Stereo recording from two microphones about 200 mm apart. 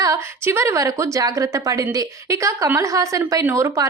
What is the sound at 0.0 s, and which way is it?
A woman's voice, 15° right (ahead or behind).